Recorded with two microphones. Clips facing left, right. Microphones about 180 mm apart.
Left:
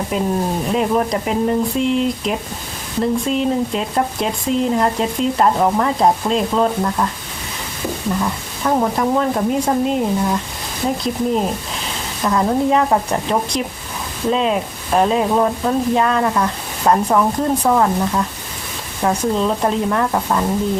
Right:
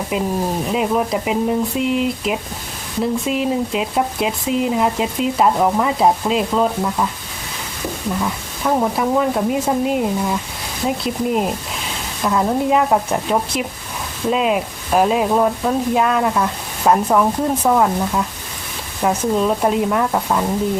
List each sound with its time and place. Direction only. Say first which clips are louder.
0.1 s speech: even; 5° right (ahead or behind)
8.2 s speech: left 1 dB; centre (ahead or behind)